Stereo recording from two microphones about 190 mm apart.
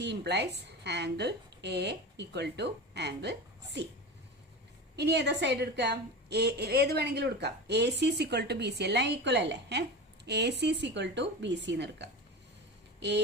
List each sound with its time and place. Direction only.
0.0 s a woman's voice: 60° right (ahead or behind)
4.9 s a woman's voice: 60° right (ahead or behind)